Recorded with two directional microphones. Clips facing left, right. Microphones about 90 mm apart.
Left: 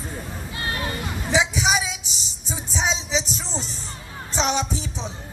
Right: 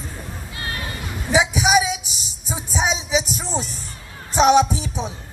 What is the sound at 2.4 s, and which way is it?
Music, 10° right (ahead or behind).